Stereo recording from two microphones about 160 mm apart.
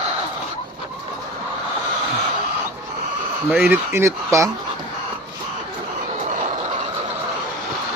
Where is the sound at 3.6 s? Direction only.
15° right (ahead or behind).